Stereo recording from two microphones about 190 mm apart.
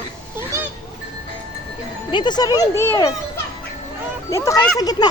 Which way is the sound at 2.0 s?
25° left (ahead or behind).